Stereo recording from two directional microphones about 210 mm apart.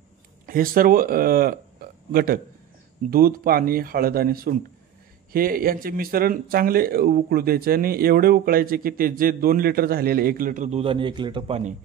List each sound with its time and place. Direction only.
0.5 s speech: 40° right (ahead or behind)